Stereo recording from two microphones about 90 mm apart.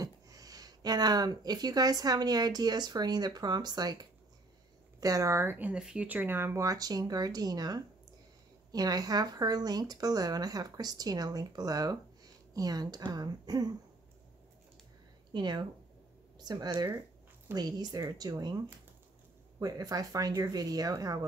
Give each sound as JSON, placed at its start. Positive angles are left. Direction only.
{"t": 0.0, "sound": "speech", "side_deg": -40}
{"t": 5.0, "sound": "a woman's voice", "side_deg": -35}
{"t": 5.7, "sound": "speech", "side_deg": -10}
{"t": 6.6, "sound": "speech", "side_deg": -40}
{"t": 15.3, "sound": "speech", "side_deg": -55}
{"t": 19.6, "sound": "speech", "side_deg": -45}